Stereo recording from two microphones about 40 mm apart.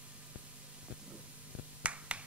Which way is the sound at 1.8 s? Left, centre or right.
Right.